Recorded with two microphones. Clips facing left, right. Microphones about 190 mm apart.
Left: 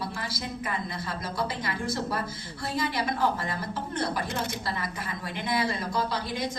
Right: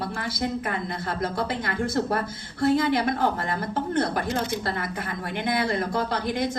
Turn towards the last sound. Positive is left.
turn(degrees=-55)  # may be behind; listen again after turning